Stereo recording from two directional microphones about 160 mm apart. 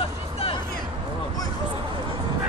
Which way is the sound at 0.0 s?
35° left (ahead or behind).